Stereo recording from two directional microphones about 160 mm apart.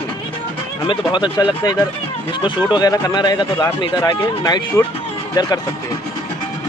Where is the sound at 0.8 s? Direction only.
30° left (ahead or behind).